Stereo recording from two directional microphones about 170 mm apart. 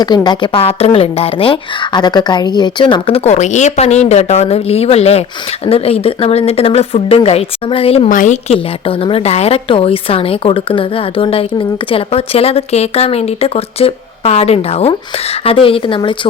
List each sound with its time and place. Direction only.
0.0 s a woman's voice: 25° left (ahead or behind)
8.1 s speech: 50° left (ahead or behind)
8.4 s a woman's voice: 30° left (ahead or behind)